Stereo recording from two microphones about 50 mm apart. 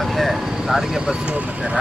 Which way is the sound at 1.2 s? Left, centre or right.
Right.